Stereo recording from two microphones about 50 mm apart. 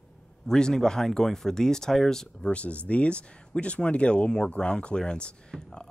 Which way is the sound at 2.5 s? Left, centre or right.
Left.